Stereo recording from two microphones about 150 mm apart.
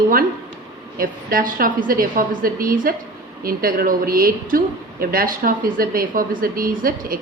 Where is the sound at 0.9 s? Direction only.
75° right (ahead or behind).